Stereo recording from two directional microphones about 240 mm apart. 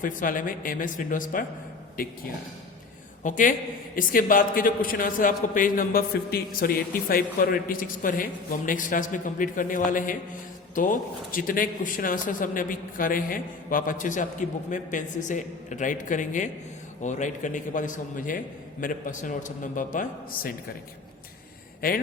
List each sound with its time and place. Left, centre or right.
0.0 s a man's voice: left
3.2 s a man's voice: left
21.8 s a man's voice: left